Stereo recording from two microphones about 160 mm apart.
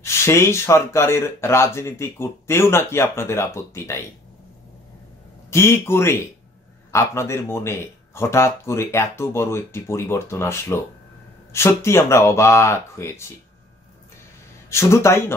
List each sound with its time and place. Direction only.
0.0 s speech: 15° left (ahead or behind)
5.5 s speech: 15° left (ahead or behind)
14.7 s speech: 15° left (ahead or behind)